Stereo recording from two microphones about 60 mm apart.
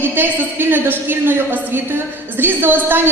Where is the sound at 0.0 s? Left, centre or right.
Right.